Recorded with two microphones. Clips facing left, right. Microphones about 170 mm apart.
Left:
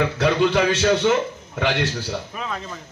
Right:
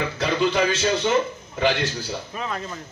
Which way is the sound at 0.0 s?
60° left (ahead or behind).